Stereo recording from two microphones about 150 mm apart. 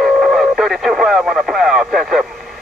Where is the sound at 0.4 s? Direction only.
Centre (ahead or behind).